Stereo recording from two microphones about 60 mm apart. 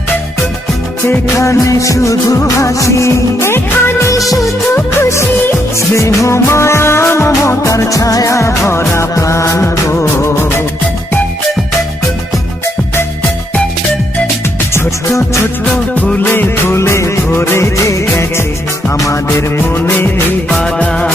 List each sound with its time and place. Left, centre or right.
1.4 s music: left
4.1 s music: left
4.7 s music: left
14.7 s music: left
16.3 s music: left
17.3 s music of bollywood: left
18.9 s music: left
20.5 s music: centre